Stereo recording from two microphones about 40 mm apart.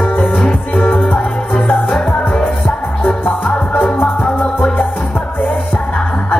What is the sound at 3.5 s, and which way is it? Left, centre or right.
Music, left.